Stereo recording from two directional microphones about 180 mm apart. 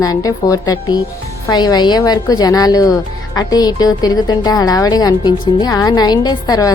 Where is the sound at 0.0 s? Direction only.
20° left (ahead or behind).